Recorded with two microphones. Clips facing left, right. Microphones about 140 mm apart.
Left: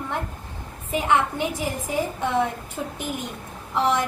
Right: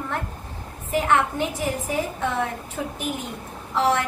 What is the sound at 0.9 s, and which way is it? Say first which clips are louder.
Speech: right 1 dB; 15° left (ahead or behind).